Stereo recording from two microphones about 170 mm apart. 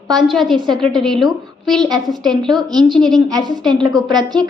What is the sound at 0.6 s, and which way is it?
Speech, 25° right (ahead or behind).